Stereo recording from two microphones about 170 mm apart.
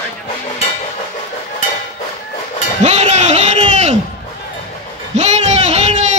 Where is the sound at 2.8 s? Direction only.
40° right (ahead or behind).